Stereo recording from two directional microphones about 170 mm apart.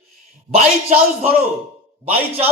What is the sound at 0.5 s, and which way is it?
A man's voice, 35° right (ahead or behind).